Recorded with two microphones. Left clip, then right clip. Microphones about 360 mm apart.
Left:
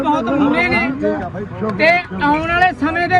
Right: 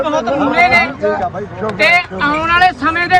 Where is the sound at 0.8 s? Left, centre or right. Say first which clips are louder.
Right 3 dB; right.